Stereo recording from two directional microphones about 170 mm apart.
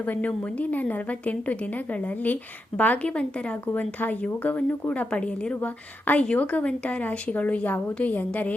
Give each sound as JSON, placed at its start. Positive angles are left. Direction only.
{"t": 0.0, "sound": "a woman's voice", "side_deg": 10}